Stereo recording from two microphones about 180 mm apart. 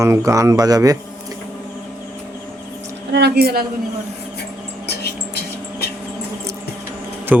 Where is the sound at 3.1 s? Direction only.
60° right (ahead or behind).